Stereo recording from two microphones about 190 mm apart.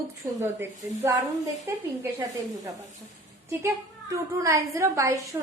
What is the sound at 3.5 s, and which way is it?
A woman's voice, 15° right (ahead or behind).